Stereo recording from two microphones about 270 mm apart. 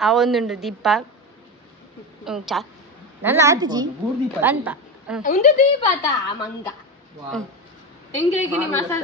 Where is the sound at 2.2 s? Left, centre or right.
Centre.